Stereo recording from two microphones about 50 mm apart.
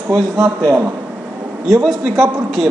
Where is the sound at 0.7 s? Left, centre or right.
Right.